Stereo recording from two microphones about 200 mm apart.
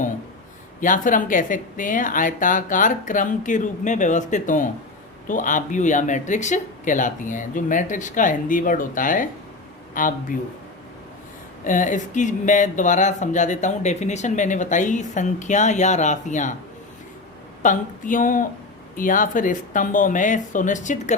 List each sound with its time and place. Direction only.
0.8 s speech: 40° left (ahead or behind)
11.6 s speech: 40° left (ahead or behind)
17.6 s speech: 40° left (ahead or behind)